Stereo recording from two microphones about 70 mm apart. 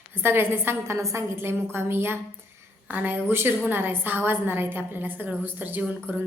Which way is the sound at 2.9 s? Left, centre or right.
Right.